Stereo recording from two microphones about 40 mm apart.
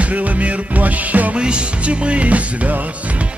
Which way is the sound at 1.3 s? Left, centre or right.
Right.